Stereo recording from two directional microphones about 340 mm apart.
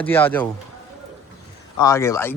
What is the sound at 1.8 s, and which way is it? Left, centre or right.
Speech, centre.